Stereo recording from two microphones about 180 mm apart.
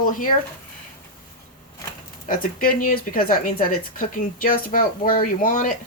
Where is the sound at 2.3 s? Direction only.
50° left (ahead or behind).